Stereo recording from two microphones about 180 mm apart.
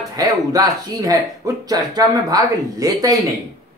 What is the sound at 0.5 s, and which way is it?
Speech, 20° right (ahead or behind).